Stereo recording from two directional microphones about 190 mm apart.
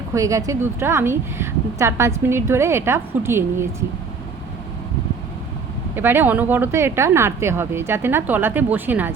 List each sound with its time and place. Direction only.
0.1 s a woman's voice: 15° right (ahead or behind)
6.0 s a woman's voice: 10° right (ahead or behind)